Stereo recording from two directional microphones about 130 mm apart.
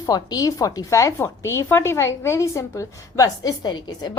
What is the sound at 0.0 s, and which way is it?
A woman's voice, 30° left (ahead or behind).